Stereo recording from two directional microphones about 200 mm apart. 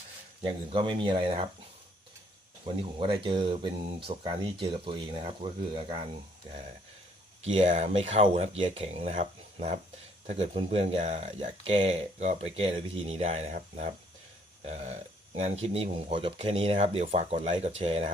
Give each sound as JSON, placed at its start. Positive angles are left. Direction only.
{"t": 0.4, "sound": "speech", "side_deg": -25}
{"t": 2.7, "sound": "speech", "side_deg": -25}
{"t": 7.4, "sound": "speech", "side_deg": -35}
{"t": 15.6, "sound": "speech", "side_deg": -30}